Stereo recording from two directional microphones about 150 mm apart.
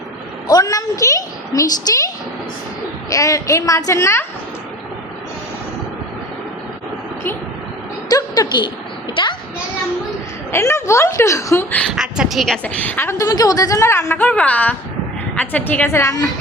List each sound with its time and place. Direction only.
0.4 s a woman's voice: 25° left (ahead or behind)
3.1 s a woman's voice: 20° left (ahead or behind)
8.1 s a woman's voice: 30° left (ahead or behind)
10.5 s a woman's voice: 20° left (ahead or behind)
11.9 s a woman's voice: 5° right (ahead or behind)
12.6 s a woman's voice: 10° left (ahead or behind)